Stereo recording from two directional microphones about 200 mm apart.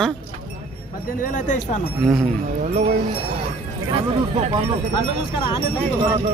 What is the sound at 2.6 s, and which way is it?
Speech, 35° right (ahead or behind).